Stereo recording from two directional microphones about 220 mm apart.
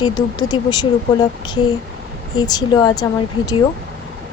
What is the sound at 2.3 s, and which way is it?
Speech, 20° left (ahead or behind).